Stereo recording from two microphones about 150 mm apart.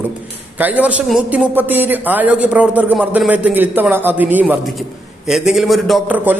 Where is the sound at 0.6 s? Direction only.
10° right (ahead or behind).